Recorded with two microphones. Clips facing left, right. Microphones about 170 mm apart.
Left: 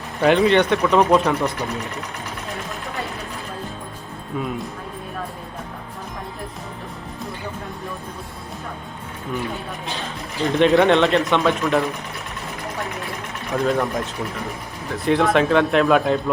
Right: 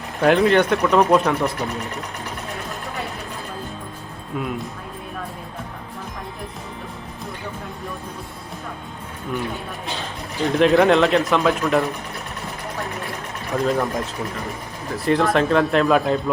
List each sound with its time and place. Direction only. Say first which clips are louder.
0.2 s speech: even; centre (ahead or behind)
4.4 s speech: even; centre (ahead or behind)
10.4 s speech: even; centre (ahead or behind)
13.6 s speech: even; centre (ahead or behind)